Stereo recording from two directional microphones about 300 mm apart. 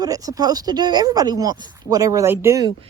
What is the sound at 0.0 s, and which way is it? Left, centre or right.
Speech, centre.